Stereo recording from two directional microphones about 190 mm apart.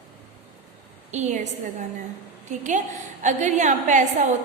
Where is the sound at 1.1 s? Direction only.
40° right (ahead or behind).